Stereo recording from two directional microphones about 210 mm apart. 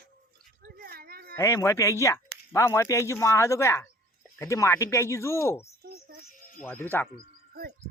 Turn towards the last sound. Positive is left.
turn(degrees=-45)  # may be behind; listen again after turning